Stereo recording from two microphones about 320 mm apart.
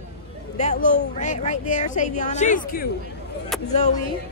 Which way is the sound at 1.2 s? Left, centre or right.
Left.